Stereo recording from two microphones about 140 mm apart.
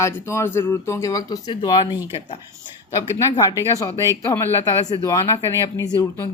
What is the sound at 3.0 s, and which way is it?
Speech, 20° left (ahead or behind).